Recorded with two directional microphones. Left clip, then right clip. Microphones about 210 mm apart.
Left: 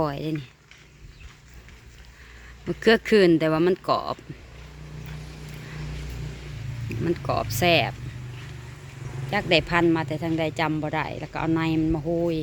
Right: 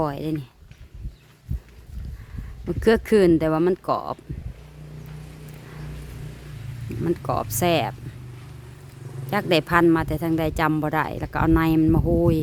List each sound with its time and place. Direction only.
0.0 s speech: 15° right (ahead or behind)
2.6 s speech: 15° right (ahead or behind)
7.0 s speech: 15° right (ahead or behind)
9.3 s speech: 30° right (ahead or behind)